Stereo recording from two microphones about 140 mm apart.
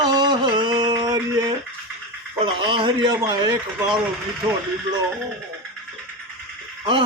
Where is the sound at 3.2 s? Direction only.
30° right (ahead or behind).